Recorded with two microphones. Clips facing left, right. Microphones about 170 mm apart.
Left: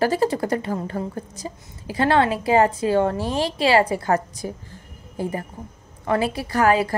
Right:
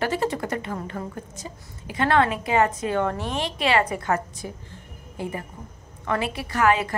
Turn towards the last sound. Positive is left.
turn(degrees=35)  # may be behind; listen again after turning